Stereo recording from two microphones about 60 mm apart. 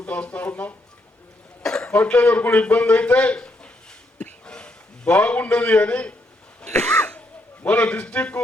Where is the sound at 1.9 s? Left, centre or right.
Left.